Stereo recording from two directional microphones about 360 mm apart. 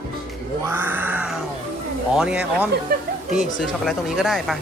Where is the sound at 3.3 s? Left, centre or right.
Centre.